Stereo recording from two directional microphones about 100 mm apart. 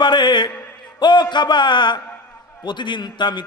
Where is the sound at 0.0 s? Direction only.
50° left (ahead or behind).